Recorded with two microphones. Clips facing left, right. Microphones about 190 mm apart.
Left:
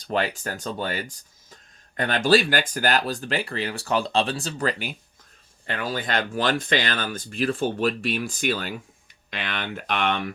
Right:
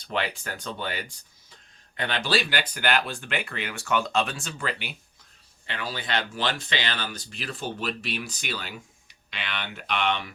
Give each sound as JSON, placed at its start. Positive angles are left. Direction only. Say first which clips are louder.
{"t": 0.0, "sound": "speech", "louder": "left 4 dB", "side_deg": 40}